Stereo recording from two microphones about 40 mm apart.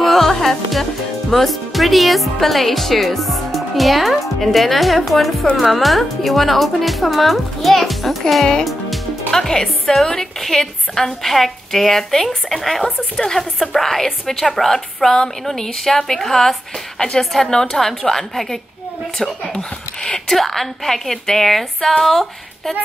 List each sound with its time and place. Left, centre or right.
0.0 s music: centre
1.3 s speech: centre
9.3 s a woman's voice: centre
19.5 s speech: left
20.2 s a woman's voice: centre